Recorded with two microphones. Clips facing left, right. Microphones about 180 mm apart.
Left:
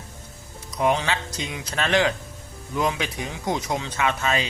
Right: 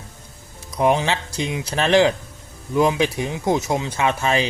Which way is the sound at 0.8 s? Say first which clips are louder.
Right 4 dB; 20° right (ahead or behind).